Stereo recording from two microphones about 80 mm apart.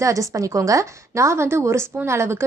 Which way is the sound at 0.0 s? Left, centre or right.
Right.